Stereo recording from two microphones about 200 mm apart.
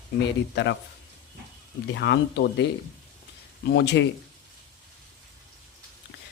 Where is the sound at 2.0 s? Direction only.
60° left (ahead or behind).